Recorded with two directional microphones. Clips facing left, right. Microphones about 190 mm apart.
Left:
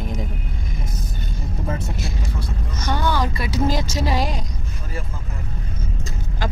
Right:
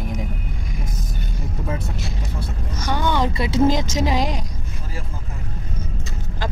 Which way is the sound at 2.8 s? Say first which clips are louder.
Right 1 dB; 15° right (ahead or behind).